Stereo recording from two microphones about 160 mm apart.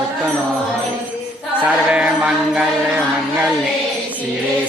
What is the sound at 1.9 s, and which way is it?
Music, 5° right (ahead or behind).